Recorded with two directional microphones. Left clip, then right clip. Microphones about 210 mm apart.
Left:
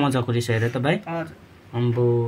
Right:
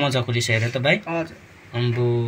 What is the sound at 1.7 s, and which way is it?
Speech, 20° left (ahead or behind).